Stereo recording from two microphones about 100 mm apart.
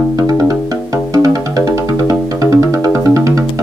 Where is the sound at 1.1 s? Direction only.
35° right (ahead or behind).